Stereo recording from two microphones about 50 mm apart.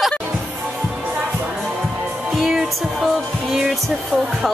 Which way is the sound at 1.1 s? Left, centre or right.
Right.